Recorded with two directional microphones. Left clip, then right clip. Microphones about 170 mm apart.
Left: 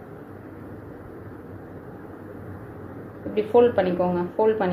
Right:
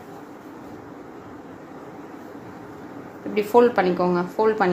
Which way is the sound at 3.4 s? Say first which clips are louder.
Right 1 dB; 50° right (ahead or behind).